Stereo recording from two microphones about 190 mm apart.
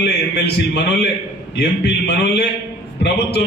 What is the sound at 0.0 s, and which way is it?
A man's voice, 60° left (ahead or behind).